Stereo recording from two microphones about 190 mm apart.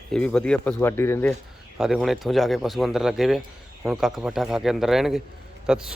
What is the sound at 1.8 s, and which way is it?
A man's voice, centre (ahead or behind).